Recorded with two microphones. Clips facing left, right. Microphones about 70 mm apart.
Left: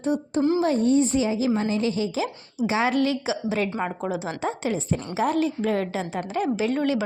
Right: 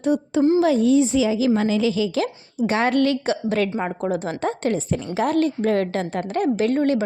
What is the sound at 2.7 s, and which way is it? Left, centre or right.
A woman's voice, right.